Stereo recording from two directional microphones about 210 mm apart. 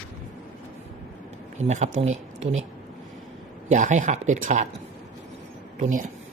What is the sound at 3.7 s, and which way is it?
Speech, 35° right (ahead or behind).